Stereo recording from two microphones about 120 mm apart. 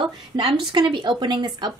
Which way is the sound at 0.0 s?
40° right (ahead or behind).